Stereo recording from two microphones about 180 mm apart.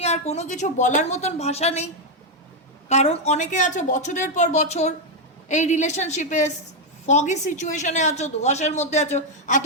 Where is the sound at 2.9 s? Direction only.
35° left (ahead or behind).